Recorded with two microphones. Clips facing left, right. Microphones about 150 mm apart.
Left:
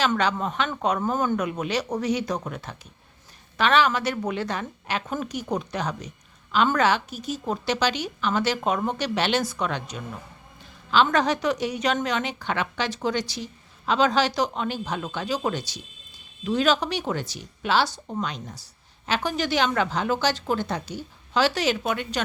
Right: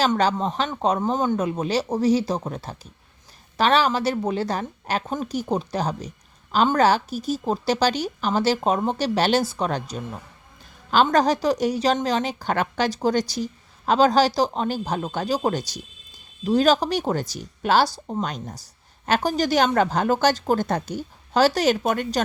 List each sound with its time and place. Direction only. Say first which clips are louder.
0.2 s a woman's voice: right 3 dB; 30° right (ahead or behind)